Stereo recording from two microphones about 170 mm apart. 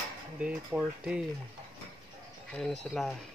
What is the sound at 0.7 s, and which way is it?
Speech, 5° right (ahead or behind).